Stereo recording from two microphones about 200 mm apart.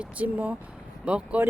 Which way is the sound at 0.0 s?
10° right (ahead or behind).